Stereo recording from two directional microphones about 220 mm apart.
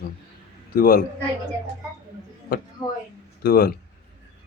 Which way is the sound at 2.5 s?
40° left (ahead or behind).